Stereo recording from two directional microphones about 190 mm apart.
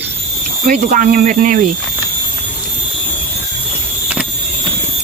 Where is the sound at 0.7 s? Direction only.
45° right (ahead or behind).